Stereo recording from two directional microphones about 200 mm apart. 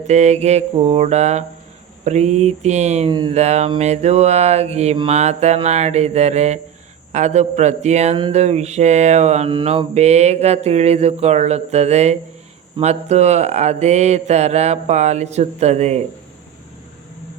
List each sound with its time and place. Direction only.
0.1 s speech: 35° right (ahead or behind)
3.1 s speech: 20° right (ahead or behind)
3.3 s speech: 35° right (ahead or behind)